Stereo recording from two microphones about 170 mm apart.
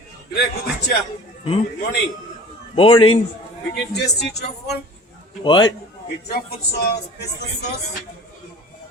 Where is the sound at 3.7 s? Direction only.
75° left (ahead or behind).